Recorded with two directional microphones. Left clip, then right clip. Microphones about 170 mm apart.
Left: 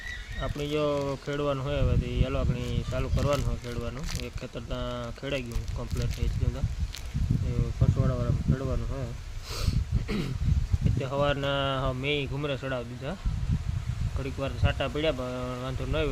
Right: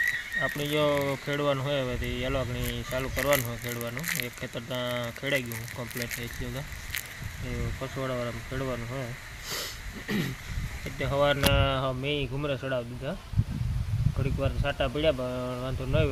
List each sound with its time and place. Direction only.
0.3 s speech: centre (ahead or behind)
4.0 s speech: 20° left (ahead or behind)
4.5 s speech: centre (ahead or behind)
8.0 s speech: centre (ahead or behind)
9.5 s a sound: centre (ahead or behind)
11.0 s speech: 5° left (ahead or behind)
14.2 s speech: centre (ahead or behind)